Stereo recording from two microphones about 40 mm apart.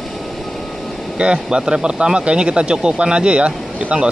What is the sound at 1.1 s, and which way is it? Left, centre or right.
Speech, right.